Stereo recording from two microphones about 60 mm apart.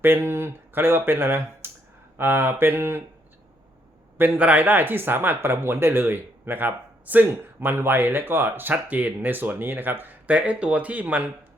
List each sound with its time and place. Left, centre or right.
0.0 s speech: right
1.6 s clicking: right
2.1 s speech: right
4.2 s speech: right
10.2 s speech: right